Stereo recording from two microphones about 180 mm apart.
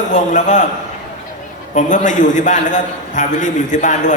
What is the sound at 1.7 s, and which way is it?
A man's voice, 45° left (ahead or behind).